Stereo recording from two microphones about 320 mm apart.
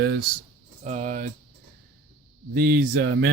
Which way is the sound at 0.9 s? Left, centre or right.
Right.